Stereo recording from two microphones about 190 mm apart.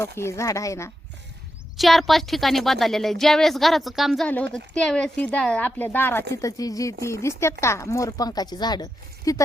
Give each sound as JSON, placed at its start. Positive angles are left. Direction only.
{"t": 0.0, "sound": "speech", "side_deg": 15}
{"t": 1.7, "sound": "speech", "side_deg": 0}